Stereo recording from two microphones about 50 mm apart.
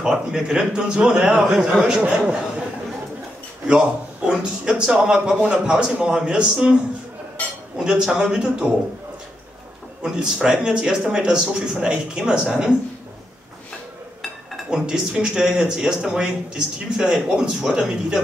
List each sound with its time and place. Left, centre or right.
0.0 s speech: centre
3.6 s speech: centre
7.7 s speech: centre
10.0 s speech: centre
14.7 s speech: centre